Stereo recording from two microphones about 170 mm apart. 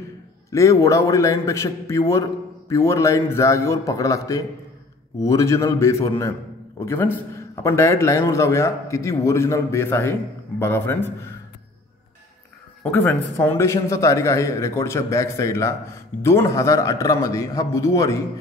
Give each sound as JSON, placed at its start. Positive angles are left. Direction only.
{"t": 0.5, "sound": "speech", "side_deg": 15}
{"t": 12.8, "sound": "speech", "side_deg": 10}